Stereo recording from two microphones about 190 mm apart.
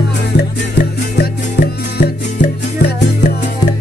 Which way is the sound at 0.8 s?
60° left (ahead or behind).